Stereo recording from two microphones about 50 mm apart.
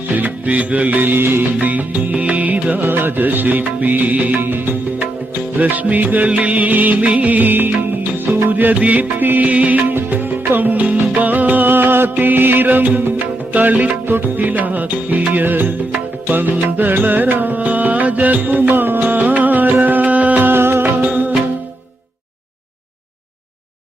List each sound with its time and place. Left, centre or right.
0.2 s music: right
1.5 s music: right
2.8 s music: right
9.9 s music: right
20.5 s music: right